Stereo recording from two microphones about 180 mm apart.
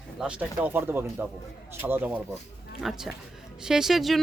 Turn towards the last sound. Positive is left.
turn(degrees=0)  # may be behind; listen again after turning